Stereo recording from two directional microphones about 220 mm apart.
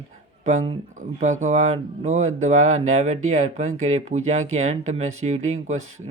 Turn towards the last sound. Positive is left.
turn(degrees=-30)  # may be behind; listen again after turning